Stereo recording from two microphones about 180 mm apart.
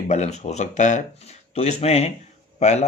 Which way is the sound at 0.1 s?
40° left (ahead or behind).